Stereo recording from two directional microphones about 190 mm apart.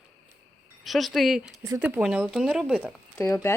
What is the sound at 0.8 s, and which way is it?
Speech, centre (ahead or behind).